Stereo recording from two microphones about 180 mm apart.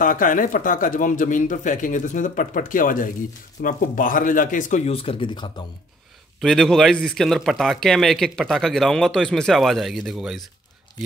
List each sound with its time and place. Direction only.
0.0 s a man's voice: 50° left (ahead or behind); by 5.5 s 25° left (ahead or behind)
6.4 s speech: centre (ahead or behind)